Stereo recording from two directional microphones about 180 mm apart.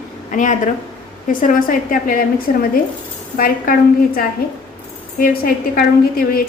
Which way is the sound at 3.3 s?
50° left (ahead or behind).